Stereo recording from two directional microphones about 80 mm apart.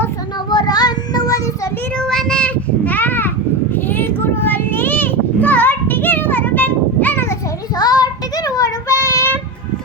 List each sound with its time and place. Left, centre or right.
0.5 s child singing: left
2.0 s child singing: centre; by 3.3 s left
3.8 s children playing: left
7.8 s child singing: left